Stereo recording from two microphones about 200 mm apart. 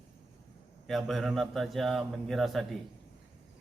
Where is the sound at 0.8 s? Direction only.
Centre (ahead or behind).